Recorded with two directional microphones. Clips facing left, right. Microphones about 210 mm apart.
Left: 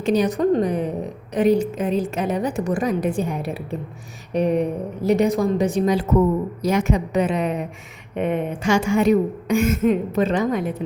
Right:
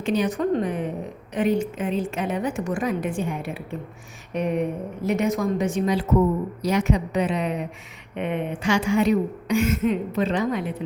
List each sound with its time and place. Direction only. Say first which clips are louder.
0.0 s a woman's voice: left 4 dB; 40° left (ahead or behind)